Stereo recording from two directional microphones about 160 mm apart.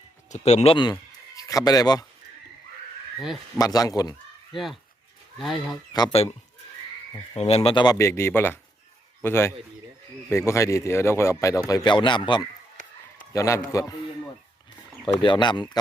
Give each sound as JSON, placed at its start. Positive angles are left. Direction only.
{"t": 0.3, "sound": "speech", "side_deg": 45}
{"t": 1.4, "sound": "speech", "side_deg": 20}
{"t": 3.6, "sound": "speech", "side_deg": 20}
{"t": 4.5, "sound": "speech", "side_deg": 0}
{"t": 5.9, "sound": "speech", "side_deg": 25}
{"t": 7.3, "sound": "speech", "side_deg": 40}
{"t": 7.9, "sound": "a man's voice", "side_deg": 15}
{"t": 15.0, "sound": "speech", "side_deg": 30}